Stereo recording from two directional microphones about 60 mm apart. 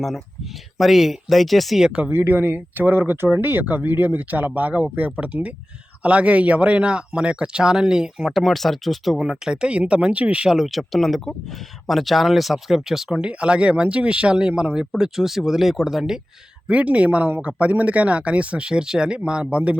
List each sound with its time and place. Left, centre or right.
0.8 s speech: centre
2.0 s speech: right; by 8.3 s centre
8.3 s speech: centre
9.1 s speech: centre
10.5 s speech: centre
16.6 s speech: right